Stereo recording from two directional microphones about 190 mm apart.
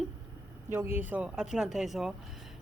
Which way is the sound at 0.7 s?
10° right (ahead or behind).